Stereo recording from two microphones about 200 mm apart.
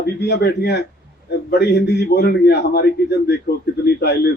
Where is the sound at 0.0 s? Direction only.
55° left (ahead or behind).